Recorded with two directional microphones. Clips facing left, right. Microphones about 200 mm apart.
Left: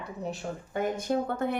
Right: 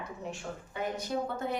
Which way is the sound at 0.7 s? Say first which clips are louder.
Left 6 dB; 50° left (ahead or behind).